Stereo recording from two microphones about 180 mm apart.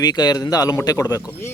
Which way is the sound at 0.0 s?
20° left (ahead or behind).